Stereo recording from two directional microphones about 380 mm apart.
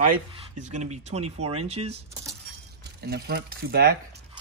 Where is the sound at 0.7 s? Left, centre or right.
Centre.